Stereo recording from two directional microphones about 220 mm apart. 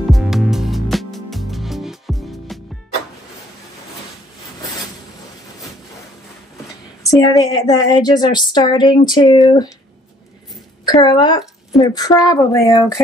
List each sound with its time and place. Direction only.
0.1 s music: centre (ahead or behind)
7.1 s speech: 15° left (ahead or behind)
10.9 s speech: 20° left (ahead or behind)